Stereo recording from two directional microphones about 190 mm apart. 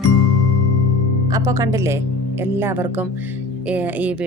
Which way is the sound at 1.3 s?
15° right (ahead or behind).